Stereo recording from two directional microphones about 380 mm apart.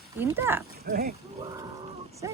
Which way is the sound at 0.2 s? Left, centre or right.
Centre.